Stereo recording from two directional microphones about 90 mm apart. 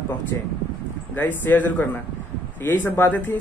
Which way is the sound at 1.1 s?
20° left (ahead or behind).